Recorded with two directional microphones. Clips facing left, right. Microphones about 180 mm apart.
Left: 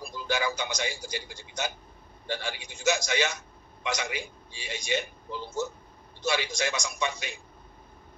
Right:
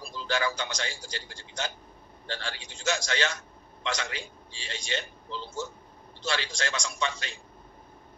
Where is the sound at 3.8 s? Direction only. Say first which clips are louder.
Left 1 dB; 15° left (ahead or behind).